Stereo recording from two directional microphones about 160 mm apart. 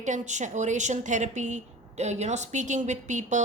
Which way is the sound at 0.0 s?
50° right (ahead or behind).